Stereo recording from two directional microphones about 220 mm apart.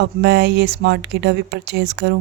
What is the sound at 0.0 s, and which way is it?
Speech, 50° right (ahead or behind).